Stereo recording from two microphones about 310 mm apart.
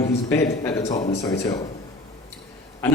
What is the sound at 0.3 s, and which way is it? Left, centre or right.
Speech, centre.